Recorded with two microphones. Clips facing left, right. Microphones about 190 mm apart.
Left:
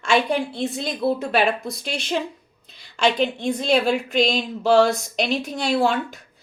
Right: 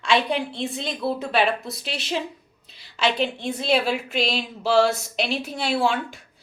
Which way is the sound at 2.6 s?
45° left (ahead or behind).